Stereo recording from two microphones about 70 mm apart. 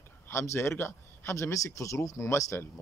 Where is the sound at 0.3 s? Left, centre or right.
Left.